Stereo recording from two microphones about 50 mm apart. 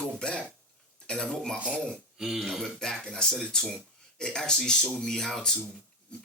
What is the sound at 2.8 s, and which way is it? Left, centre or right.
Speech, centre.